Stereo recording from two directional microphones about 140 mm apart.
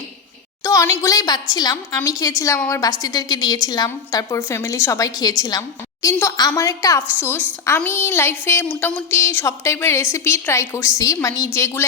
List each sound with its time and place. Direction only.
0.6 s a woman's voice: 20° left (ahead or behind)